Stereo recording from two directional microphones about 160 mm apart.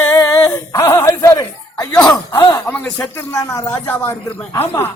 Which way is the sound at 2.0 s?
15° left (ahead or behind).